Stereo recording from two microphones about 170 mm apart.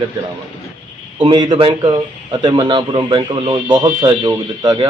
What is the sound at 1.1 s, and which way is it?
Speech, 25° right (ahead or behind).